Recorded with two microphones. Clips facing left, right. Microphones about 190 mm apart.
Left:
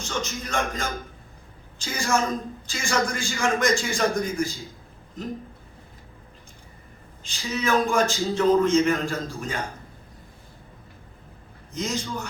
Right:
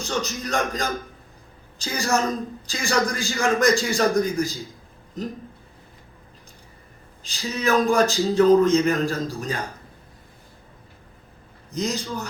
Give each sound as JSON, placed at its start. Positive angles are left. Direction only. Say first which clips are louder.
{"t": 0.0, "sound": "speech", "louder": "right 3 dB", "side_deg": -35}
{"t": 7.2, "sound": "speech", "louder": "even", "side_deg": -35}
{"t": 11.7, "sound": "speech", "louder": "right 2 dB", "side_deg": -35}